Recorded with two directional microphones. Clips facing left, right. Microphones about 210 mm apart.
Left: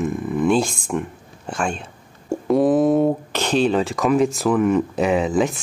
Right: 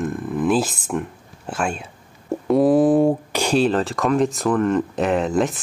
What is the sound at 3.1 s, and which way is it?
Speech, 10° right (ahead or behind).